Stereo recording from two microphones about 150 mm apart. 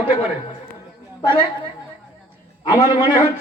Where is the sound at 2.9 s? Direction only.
30° left (ahead or behind).